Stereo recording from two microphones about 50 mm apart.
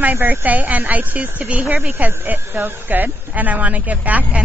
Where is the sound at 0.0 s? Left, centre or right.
Right.